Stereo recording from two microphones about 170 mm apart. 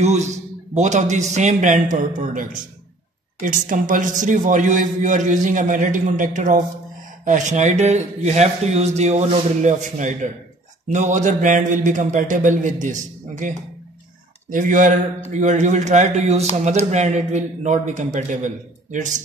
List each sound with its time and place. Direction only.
0.0 s a man's voice: 40° right (ahead or behind)